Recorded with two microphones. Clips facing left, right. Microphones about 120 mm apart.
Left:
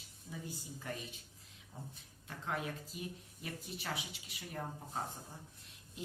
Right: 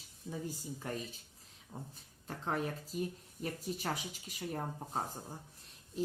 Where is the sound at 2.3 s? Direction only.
35° right (ahead or behind).